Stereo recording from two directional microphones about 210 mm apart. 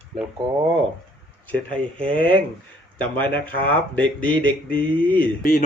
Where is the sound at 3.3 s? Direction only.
5° left (ahead or behind).